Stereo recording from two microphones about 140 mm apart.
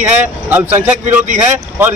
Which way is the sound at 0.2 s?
15° right (ahead or behind).